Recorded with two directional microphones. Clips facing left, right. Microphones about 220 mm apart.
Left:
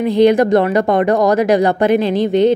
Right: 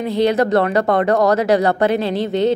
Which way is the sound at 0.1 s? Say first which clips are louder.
Left 4 dB; 15° left (ahead or behind).